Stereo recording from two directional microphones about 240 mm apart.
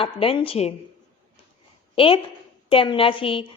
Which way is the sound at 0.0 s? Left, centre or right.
Left.